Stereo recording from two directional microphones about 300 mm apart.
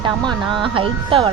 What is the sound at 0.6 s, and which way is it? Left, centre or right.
Speech, centre.